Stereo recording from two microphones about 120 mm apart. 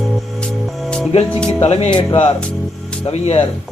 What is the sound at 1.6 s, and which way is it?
Speech, 55° left (ahead or behind).